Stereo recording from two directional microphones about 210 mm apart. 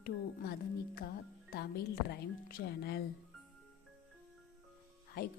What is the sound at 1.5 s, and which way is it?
A woman's voice, 45° left (ahead or behind).